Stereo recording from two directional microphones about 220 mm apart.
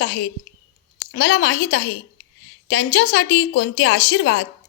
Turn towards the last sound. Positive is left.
turn(degrees=55)  # may be behind; listen again after turning